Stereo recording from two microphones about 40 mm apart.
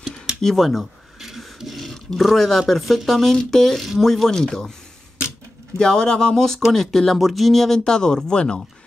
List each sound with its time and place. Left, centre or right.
0.4 s a sound: centre
2.7 s speech: centre
5.8 s speech: centre